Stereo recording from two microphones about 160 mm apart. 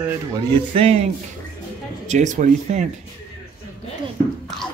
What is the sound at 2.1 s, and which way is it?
Speech, 50° right (ahead or behind).